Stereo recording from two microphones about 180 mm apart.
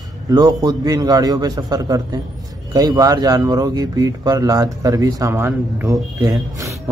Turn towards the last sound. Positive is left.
turn(degrees=-20)  # may be behind; listen again after turning